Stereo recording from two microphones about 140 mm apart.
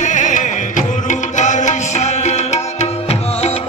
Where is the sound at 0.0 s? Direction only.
60° left (ahead or behind).